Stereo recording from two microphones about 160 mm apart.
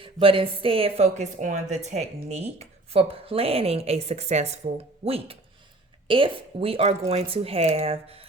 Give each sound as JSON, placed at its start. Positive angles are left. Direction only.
{"t": 0.0, "sound": "a woman's voice", "side_deg": -35}